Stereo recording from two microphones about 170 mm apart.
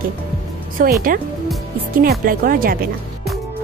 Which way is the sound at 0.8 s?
55° right (ahead or behind).